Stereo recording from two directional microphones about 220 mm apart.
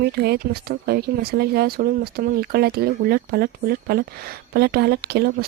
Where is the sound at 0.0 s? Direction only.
45° right (ahead or behind).